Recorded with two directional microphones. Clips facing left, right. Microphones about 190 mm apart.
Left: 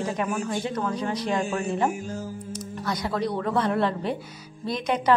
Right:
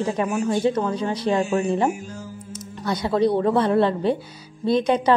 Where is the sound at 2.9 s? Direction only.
25° right (ahead or behind).